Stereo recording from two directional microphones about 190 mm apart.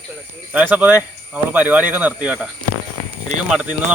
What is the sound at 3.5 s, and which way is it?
Speech, 5° right (ahead or behind).